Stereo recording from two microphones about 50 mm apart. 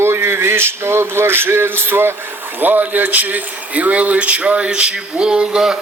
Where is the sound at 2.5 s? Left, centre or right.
Right.